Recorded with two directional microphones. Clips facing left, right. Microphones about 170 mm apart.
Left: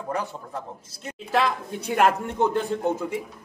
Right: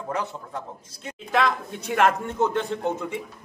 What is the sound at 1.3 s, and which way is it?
Speech, 5° left (ahead or behind).